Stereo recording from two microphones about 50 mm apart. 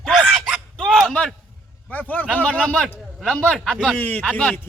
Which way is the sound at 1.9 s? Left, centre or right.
Left.